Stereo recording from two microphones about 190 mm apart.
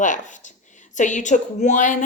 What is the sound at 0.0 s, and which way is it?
A woman's voice, 40° left (ahead or behind).